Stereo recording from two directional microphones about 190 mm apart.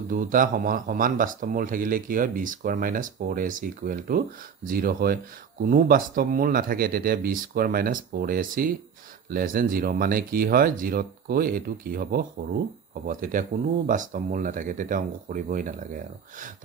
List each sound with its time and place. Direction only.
0.1 s speech: 45° right (ahead or behind)